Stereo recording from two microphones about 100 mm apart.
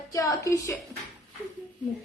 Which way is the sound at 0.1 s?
35° left (ahead or behind).